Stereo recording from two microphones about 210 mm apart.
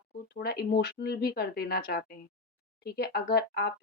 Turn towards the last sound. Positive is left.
turn(degrees=50)  # may be behind; listen again after turning